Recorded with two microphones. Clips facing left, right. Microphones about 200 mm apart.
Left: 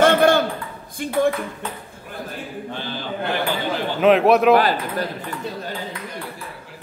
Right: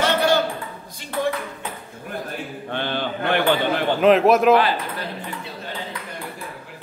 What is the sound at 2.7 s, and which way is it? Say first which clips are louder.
Speech: right 6 dB; 65° right (ahead or behind).